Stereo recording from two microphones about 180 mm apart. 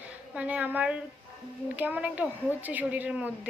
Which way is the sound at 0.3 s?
10° right (ahead or behind).